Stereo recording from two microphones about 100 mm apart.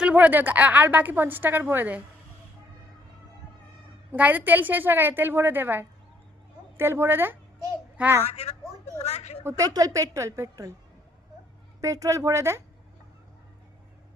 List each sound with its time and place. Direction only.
0.0 s a woman's voice: 15° right (ahead or behind)
4.1 s a woman's voice: 15° right (ahead or behind)
8.3 s a woman's voice: 90° left
9.4 s a woman's voice: 25° right (ahead or behind)
9.6 s a woman's voice: 35° right (ahead or behind)
11.8 s a woman's voice: 30° right (ahead or behind)